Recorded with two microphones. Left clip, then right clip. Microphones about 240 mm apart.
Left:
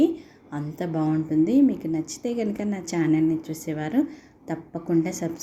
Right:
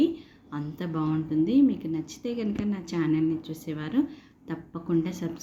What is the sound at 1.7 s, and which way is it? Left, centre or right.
Speech, left.